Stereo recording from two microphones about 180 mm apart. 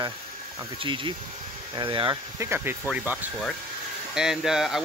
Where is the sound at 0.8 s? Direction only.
25° right (ahead or behind).